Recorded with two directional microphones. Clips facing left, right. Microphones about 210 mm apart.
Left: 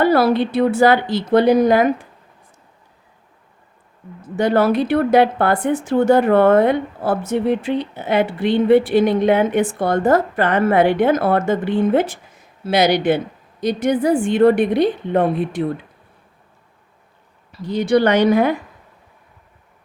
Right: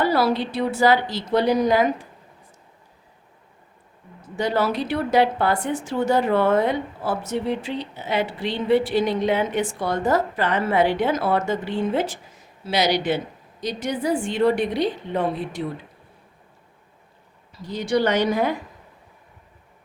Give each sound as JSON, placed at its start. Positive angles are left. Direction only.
{"t": 0.0, "sound": "a woman's voice", "side_deg": 55}
{"t": 4.4, "sound": "a woman's voice", "side_deg": 55}
{"t": 17.5, "sound": "a woman's voice", "side_deg": 65}